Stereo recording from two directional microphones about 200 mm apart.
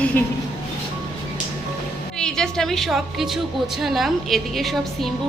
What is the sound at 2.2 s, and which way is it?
A woman's voice, 5° left (ahead or behind).